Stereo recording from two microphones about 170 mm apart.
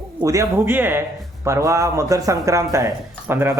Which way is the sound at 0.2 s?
20° right (ahead or behind).